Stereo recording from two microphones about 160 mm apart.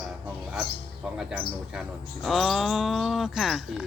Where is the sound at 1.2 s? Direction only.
5° right (ahead or behind).